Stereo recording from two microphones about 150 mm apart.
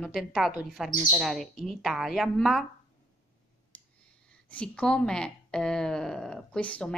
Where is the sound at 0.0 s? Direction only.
Centre (ahead or behind).